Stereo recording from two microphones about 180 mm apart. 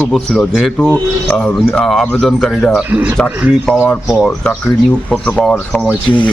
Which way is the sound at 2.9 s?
10° right (ahead or behind).